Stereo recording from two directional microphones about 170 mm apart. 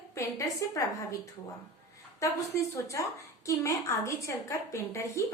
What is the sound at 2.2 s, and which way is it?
A woman's voice, 20° left (ahead or behind).